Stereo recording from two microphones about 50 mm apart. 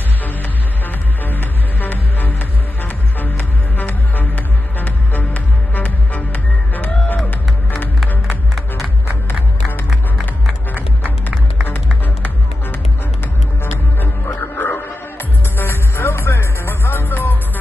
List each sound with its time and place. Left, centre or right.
1.2 s music: left
9.8 s music: centre
13.9 s music: left